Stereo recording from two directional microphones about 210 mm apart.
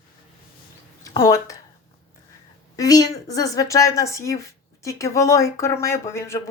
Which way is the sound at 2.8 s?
15° left (ahead or behind).